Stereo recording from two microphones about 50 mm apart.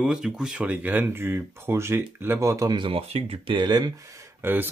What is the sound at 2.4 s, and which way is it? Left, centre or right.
Speech, right.